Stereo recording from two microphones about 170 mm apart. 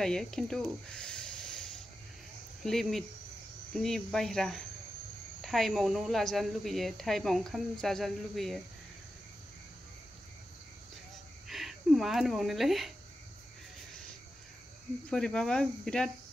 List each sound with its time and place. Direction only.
0.0 s speech: 5° left (ahead or behind)
2.6 s speech: centre (ahead or behind)
11.4 s speech: centre (ahead or behind)
15.0 s speech: 5° left (ahead or behind)